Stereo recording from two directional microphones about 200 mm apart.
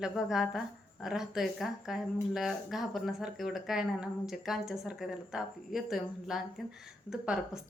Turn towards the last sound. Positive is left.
turn(degrees=-5)  # may be behind; listen again after turning